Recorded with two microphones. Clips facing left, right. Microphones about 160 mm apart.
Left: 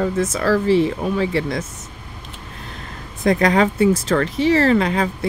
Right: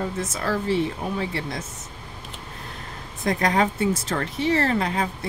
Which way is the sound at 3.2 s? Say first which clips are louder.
Left 6 dB; 90° left.